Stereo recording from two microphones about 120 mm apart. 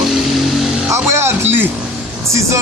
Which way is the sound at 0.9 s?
20° right (ahead or behind).